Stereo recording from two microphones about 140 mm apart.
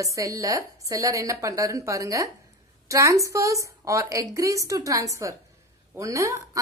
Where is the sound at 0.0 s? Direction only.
25° right (ahead or behind).